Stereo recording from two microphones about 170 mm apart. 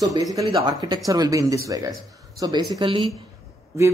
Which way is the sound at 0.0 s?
20° right (ahead or behind).